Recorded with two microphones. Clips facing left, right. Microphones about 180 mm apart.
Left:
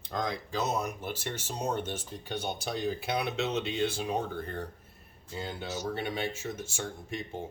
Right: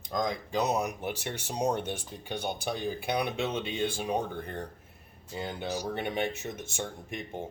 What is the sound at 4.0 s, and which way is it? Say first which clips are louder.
Speech: right 1 dB; 15° right (ahead or behind).